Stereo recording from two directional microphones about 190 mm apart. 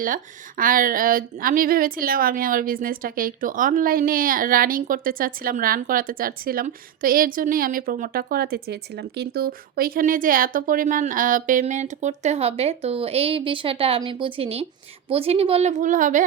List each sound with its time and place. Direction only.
0.0 s a woman's voice: 45° right (ahead or behind)